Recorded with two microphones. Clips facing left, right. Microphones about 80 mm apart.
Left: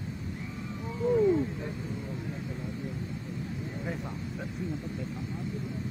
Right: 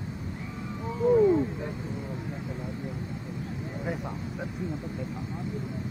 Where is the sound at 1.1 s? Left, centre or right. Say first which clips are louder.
Right 3 dB; right.